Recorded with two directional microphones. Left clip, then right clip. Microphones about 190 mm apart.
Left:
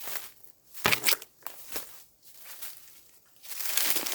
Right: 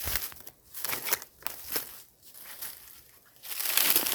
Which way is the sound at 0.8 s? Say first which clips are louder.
Left 12 dB; 30° right (ahead or behind).